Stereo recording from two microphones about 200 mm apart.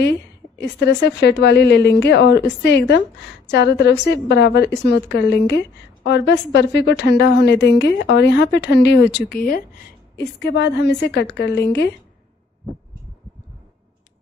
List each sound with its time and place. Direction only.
0.6 s a woman's voice: 60° left (ahead or behind)